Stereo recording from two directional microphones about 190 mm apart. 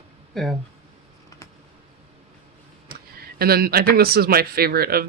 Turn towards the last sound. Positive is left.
turn(degrees=-55)  # may be behind; listen again after turning